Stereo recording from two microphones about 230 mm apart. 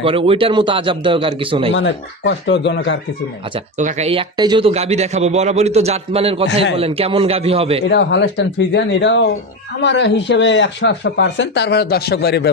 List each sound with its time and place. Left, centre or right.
0.0 s speech: right
1.7 s speech: left
3.7 s speech: right
7.9 s speech: left